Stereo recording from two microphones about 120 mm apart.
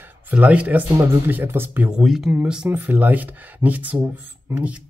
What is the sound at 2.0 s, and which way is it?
Speech, 5° right (ahead or behind).